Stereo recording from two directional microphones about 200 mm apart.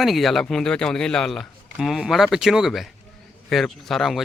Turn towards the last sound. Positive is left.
turn(degrees=0)  # may be behind; listen again after turning